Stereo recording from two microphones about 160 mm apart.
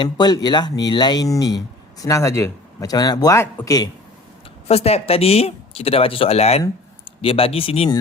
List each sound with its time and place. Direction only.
0.0 s speech: 25° left (ahead or behind)
4.7 s speech: 40° left (ahead or behind)